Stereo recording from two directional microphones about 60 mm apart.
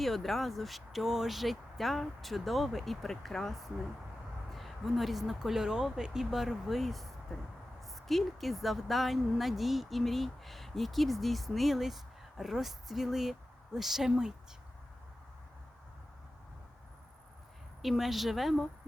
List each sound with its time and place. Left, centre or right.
0.0 s speech: centre
17.8 s speech: centre